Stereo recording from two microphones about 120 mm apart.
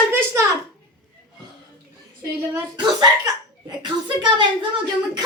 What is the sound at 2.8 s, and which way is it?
Speech, 35° right (ahead or behind).